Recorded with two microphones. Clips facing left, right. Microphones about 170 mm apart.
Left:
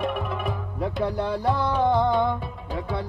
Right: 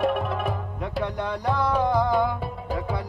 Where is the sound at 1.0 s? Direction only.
30° left (ahead or behind).